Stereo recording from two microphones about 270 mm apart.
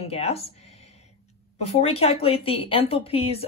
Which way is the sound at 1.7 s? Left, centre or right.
Left.